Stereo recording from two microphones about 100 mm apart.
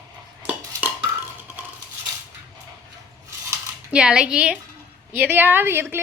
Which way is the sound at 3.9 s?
10° right (ahead or behind).